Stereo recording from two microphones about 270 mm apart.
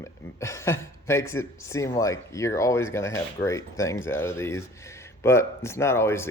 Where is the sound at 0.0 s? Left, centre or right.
Centre.